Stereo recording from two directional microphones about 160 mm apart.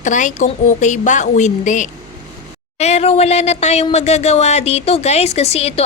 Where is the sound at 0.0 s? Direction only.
50° left (ahead or behind).